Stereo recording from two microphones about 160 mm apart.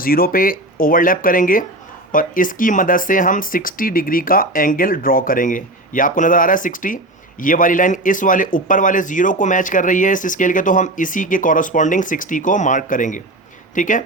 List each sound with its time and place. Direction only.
0.0 s speech: 65° left (ahead or behind)